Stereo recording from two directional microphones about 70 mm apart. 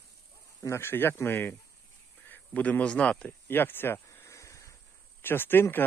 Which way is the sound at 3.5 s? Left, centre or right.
Left.